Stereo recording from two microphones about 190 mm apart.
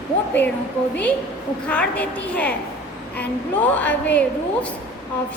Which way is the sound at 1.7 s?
5° left (ahead or behind).